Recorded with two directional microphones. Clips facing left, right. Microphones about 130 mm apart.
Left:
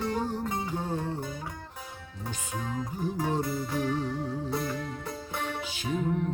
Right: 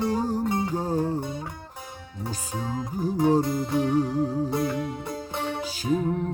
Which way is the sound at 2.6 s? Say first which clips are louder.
Right 4 dB; 30° right (ahead or behind).